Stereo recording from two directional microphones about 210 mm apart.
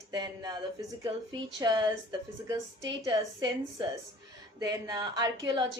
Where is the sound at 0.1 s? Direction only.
20° right (ahead or behind).